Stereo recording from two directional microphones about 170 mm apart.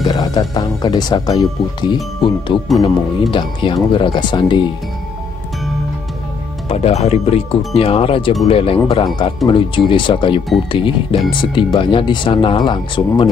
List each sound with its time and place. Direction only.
0.0 s speech: 25° left (ahead or behind)
6.7 s speech: 35° left (ahead or behind)